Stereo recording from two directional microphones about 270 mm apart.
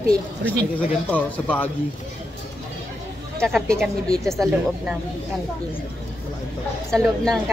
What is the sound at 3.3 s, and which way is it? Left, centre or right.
Speech, centre.